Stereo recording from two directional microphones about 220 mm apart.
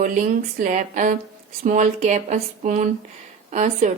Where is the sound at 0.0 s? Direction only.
35° right (ahead or behind).